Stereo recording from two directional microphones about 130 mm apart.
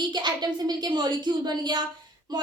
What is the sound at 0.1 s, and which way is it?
A woman's voice, 35° right (ahead or behind).